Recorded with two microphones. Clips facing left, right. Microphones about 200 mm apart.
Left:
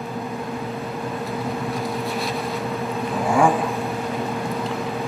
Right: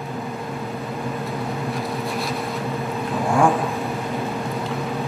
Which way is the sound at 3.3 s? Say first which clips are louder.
Even; centre (ahead or behind).